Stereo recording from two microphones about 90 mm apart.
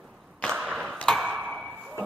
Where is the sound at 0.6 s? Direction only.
10° right (ahead or behind).